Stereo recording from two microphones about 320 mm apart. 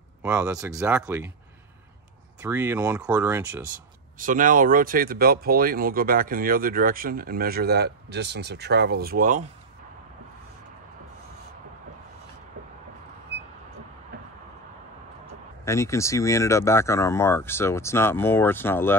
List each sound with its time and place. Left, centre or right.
0.2 s speech: centre
2.4 s speech: centre
4.2 s speech: right
15.6 s speech: centre